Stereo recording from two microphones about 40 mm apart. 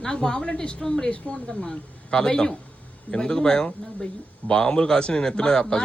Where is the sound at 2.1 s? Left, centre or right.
Centre.